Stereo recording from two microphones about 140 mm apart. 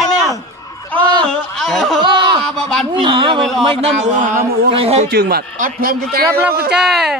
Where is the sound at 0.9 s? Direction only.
5° left (ahead or behind).